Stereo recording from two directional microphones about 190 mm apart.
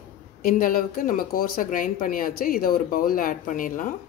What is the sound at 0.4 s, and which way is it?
Speech, 50° left (ahead or behind).